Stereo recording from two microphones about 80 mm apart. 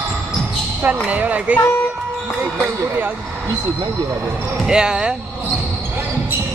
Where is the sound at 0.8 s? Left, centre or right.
Right.